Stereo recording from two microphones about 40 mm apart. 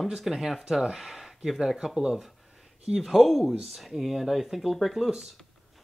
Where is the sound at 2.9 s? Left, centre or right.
Centre.